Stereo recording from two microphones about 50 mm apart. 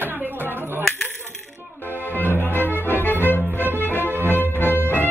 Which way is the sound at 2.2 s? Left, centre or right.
Left.